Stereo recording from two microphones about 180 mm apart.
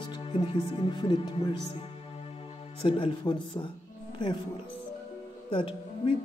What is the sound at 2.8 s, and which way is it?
Speech, 30° left (ahead or behind).